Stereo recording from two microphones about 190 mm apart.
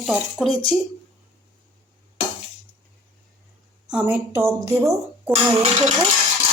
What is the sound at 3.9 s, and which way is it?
A woman's voice, 10° right (ahead or behind).